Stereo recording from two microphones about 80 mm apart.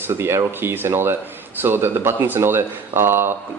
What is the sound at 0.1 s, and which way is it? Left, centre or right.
Speech, right.